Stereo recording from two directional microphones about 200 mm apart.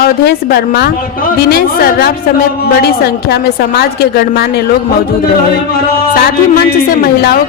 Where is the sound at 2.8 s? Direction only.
50° left (ahead or behind).